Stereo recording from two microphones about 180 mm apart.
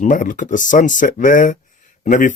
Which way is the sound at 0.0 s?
45° left (ahead or behind).